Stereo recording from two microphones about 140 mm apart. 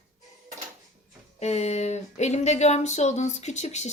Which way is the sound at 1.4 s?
50° left (ahead or behind).